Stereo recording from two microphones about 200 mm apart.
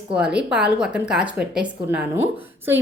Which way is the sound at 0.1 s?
5° right (ahead or behind).